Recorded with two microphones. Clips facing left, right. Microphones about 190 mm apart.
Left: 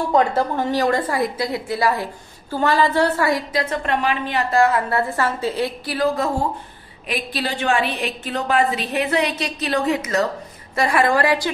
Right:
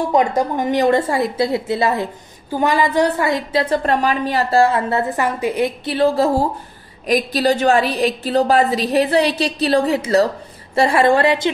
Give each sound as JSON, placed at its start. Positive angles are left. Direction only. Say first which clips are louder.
{"t": 0.1, "sound": "a woman's voice", "louder": "even", "side_deg": -15}